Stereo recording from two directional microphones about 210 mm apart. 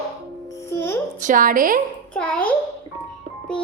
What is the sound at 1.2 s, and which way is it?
Speech, 40° right (ahead or behind).